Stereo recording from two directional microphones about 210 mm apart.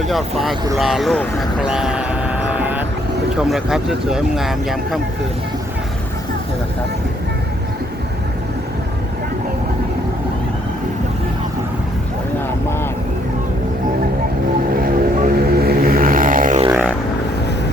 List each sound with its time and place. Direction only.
0.0 s speech: centre (ahead or behind)
0.8 s vehicle: centre (ahead or behind)
3.3 s speech: centre (ahead or behind)
14.8 s music: 45° right (ahead or behind)